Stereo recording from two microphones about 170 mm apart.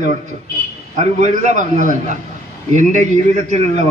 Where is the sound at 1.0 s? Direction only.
45° right (ahead or behind).